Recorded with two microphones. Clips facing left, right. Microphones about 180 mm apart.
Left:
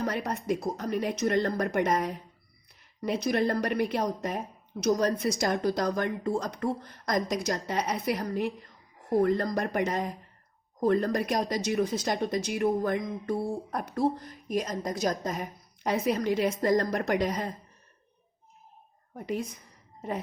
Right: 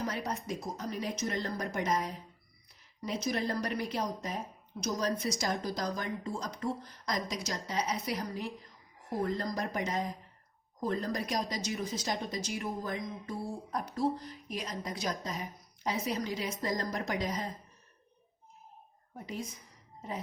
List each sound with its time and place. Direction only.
0.0 s speech: 60° left (ahead or behind)
19.1 s speech: 60° left (ahead or behind)